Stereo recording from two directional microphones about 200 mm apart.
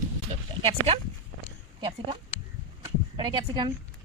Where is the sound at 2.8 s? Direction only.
25° right (ahead or behind).